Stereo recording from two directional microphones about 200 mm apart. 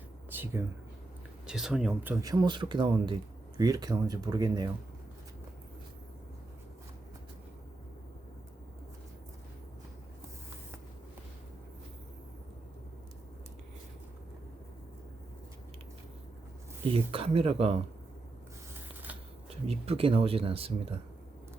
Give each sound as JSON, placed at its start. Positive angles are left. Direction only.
{"t": 1.5, "sound": "speech", "side_deg": -5}
{"t": 2.2, "sound": "speech", "side_deg": -20}
{"t": 16.8, "sound": "speech", "side_deg": -30}
{"t": 19.6, "sound": "speech", "side_deg": -30}